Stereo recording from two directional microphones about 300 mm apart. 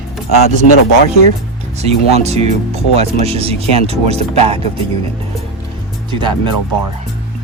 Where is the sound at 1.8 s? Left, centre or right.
Right.